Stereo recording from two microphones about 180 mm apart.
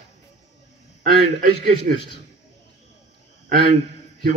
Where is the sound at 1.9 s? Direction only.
50° right (ahead or behind).